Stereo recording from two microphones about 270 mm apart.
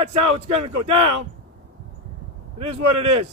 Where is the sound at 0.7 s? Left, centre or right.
Right.